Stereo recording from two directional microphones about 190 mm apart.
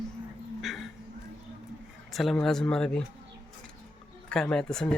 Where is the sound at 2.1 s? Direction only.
Centre (ahead or behind).